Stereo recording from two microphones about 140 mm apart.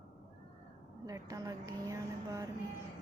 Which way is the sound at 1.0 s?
25° right (ahead or behind).